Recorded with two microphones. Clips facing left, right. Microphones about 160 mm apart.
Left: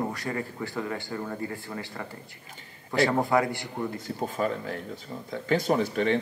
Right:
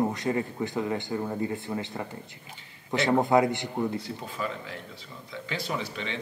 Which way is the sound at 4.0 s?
45° left (ahead or behind).